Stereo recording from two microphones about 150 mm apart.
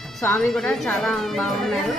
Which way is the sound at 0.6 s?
5° left (ahead or behind).